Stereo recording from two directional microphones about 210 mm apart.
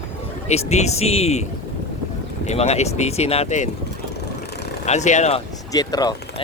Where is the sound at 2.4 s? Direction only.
30° left (ahead or behind).